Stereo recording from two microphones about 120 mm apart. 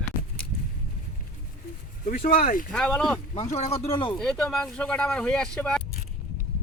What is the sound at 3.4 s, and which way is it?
Speech, 65° left (ahead or behind).